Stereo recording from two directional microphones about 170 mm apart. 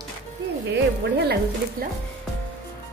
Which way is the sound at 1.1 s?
75° right (ahead or behind).